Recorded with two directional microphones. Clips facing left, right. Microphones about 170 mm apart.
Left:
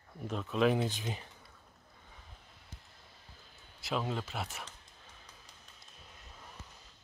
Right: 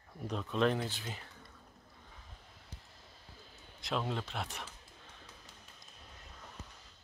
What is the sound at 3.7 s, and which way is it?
Speech, 5° left (ahead or behind).